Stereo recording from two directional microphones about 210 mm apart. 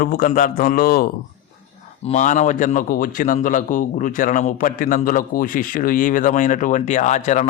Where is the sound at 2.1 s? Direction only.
35° left (ahead or behind).